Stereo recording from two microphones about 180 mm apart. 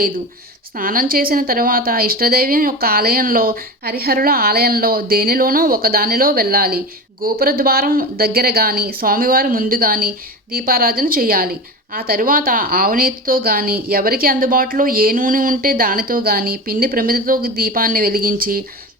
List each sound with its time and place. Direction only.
0.8 s a woman's voice: 50° right (ahead or behind)